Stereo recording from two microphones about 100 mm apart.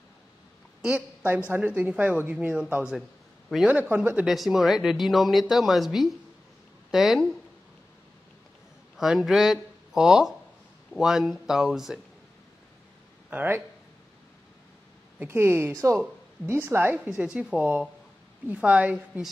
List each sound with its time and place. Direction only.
0.8 s a man's voice: 15° right (ahead or behind)
3.7 s speech: 15° right (ahead or behind)
4.3 s speech: centre (ahead or behind)
8.9 s speech: 5° right (ahead or behind)
13.3 s a woman's voice: 20° right (ahead or behind)
15.1 s a woman's voice: 25° right (ahead or behind)